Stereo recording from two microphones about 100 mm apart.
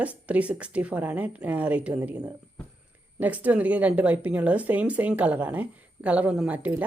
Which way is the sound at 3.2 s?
15° right (ahead or behind).